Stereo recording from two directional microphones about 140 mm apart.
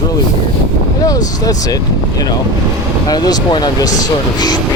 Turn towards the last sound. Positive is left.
turn(degrees=30)  # may be behind; listen again after turning